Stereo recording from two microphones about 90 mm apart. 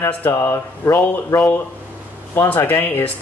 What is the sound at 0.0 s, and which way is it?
Speech, 30° left (ahead or behind).